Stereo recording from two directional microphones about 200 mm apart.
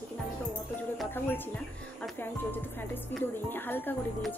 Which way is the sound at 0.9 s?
10° left (ahead or behind).